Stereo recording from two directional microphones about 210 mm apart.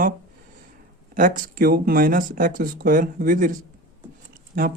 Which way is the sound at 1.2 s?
40° right (ahead or behind).